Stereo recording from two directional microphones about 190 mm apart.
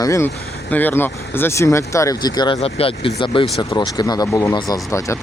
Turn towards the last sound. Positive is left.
turn(degrees=15)  # may be behind; listen again after turning